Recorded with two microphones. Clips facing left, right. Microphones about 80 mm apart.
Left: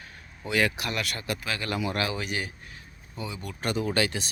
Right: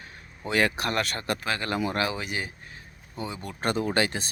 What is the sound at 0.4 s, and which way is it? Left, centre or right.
Speech, right.